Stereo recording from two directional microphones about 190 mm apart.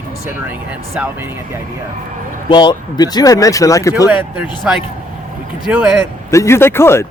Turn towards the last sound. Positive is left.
turn(degrees=15)  # may be behind; listen again after turning